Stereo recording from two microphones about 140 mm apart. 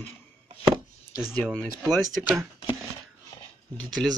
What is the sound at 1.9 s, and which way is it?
Speech, centre (ahead or behind).